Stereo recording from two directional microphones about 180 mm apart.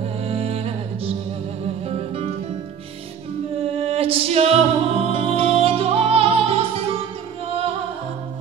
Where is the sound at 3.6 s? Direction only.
35° right (ahead or behind).